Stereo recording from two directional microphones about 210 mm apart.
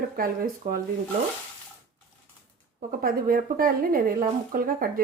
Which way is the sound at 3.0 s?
40° right (ahead or behind).